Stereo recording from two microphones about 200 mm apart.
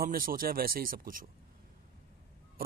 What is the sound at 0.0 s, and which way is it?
Speech, 45° right (ahead or behind).